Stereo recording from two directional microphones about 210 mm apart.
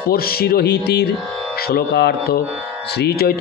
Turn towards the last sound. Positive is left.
turn(degrees=45)  # may be behind; listen again after turning